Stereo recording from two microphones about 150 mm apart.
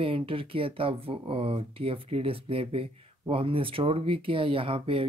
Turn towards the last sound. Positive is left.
turn(degrees=-35)  # may be behind; listen again after turning